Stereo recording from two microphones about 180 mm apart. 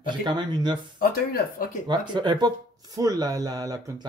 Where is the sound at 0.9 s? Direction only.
55° left (ahead or behind).